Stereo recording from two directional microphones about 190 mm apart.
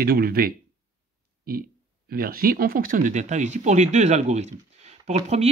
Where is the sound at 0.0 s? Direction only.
55° right (ahead or behind).